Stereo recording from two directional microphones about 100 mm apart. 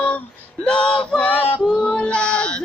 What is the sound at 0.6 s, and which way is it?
Male singing, 10° left (ahead or behind).